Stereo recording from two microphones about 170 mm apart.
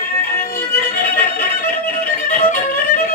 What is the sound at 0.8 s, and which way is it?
Music, 60° left (ahead or behind).